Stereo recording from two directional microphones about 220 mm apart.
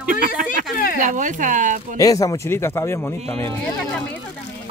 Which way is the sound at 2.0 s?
15° left (ahead or behind).